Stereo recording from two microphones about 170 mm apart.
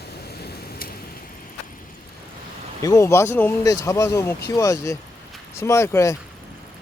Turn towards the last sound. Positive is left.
turn(degrees=15)  # may be behind; listen again after turning